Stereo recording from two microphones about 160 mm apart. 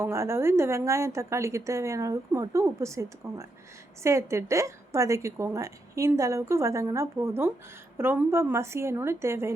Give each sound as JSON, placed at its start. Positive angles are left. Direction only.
{"t": 0.0, "sound": "a woman's voice", "side_deg": -15}